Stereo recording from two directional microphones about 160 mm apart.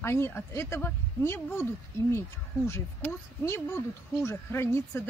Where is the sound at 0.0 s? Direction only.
15° left (ahead or behind).